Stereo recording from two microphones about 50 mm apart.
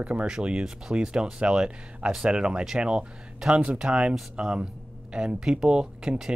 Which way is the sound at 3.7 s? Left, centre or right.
Centre.